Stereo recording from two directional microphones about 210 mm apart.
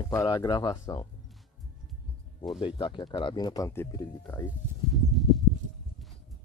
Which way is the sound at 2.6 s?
25° left (ahead or behind).